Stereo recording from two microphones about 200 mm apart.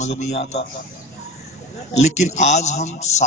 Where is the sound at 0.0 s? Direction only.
35° left (ahead or behind).